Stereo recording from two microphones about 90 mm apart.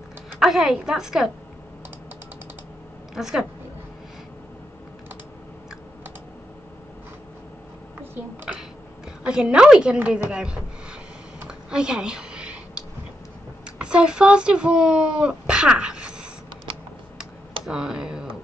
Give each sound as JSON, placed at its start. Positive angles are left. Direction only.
{"t": 0.4, "sound": "a woman's voice", "side_deg": -5}
{"t": 3.2, "sound": "a woman's voice", "side_deg": -5}
{"t": 9.2, "sound": "a woman's voice", "side_deg": -10}
{"t": 9.9, "sound": "a sound", "side_deg": -15}
{"t": 13.7, "sound": "speech", "side_deg": -10}
{"t": 17.6, "sound": "speech", "side_deg": -5}